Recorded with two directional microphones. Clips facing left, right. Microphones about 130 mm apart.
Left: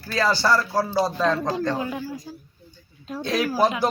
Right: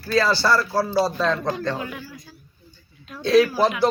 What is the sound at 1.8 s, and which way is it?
Speech, 30° left (ahead or behind).